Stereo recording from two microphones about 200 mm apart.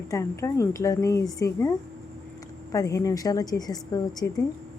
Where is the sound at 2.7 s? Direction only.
15° left (ahead or behind).